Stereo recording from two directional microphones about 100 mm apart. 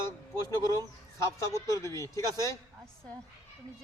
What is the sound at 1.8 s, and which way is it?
Speech, 30° left (ahead or behind).